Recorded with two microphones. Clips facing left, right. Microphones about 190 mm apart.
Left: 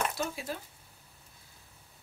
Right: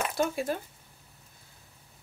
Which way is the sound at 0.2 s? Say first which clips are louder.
Right 7 dB; 55° right (ahead or behind).